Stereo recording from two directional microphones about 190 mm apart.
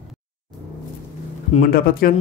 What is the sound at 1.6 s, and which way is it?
Speech, 50° left (ahead or behind).